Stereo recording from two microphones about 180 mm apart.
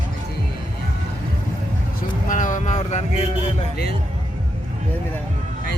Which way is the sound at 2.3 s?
45° left (ahead or behind).